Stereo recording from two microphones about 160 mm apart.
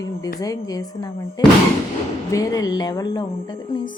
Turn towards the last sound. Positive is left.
turn(degrees=25)  # may be behind; listen again after turning